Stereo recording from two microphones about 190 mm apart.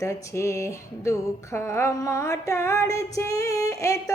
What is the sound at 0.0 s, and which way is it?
Music, 15° left (ahead or behind).